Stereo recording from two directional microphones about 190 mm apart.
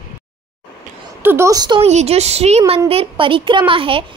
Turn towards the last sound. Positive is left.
turn(degrees=-25)  # may be behind; listen again after turning